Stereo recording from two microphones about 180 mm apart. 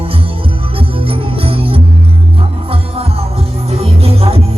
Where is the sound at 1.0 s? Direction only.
30° right (ahead or behind).